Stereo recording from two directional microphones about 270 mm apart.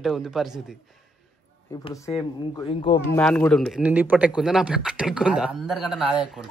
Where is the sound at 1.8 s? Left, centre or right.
Centre.